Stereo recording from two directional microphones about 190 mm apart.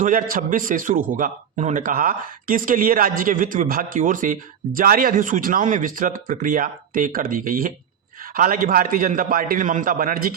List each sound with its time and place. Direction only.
0.0 s a man's voice: 45° right (ahead or behind)